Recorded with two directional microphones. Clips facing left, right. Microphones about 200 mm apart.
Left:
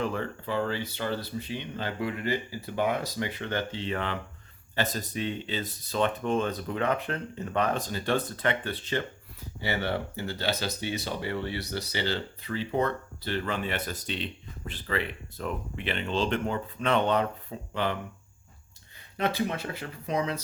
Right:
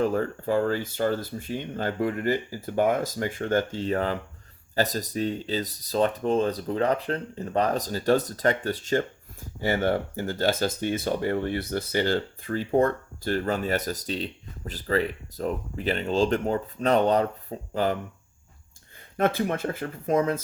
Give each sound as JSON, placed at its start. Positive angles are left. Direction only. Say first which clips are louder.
{"t": 0.0, "sound": "speech", "louder": "right 6 dB", "side_deg": -40}
{"t": 19.1, "sound": "speech", "louder": "right 4 dB", "side_deg": -50}